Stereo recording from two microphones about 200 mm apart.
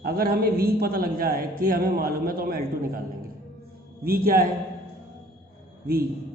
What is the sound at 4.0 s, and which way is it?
Speech, 50° right (ahead or behind).